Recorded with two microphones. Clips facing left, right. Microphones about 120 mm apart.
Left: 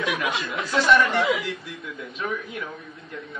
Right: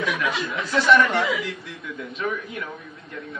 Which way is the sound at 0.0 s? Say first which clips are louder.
Right 1 dB; 60° left (ahead or behind).